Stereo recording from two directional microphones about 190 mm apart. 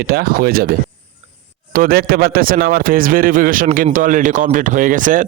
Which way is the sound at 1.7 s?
50° right (ahead or behind).